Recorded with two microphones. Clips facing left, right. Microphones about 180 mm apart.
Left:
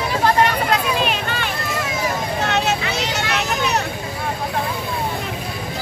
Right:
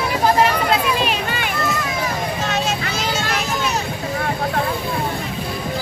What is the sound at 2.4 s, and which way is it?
Vehicle, 65° left (ahead or behind).